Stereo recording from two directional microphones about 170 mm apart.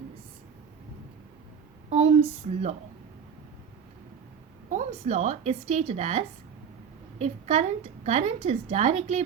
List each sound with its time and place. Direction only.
1.9 s speech: 35° right (ahead or behind)
4.7 s a woman's voice: 40° right (ahead or behind)